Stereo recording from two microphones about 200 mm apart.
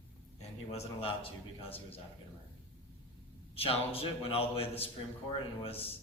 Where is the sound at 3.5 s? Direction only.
30° left (ahead or behind).